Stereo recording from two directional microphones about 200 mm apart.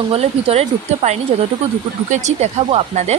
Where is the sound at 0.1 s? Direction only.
30° right (ahead or behind).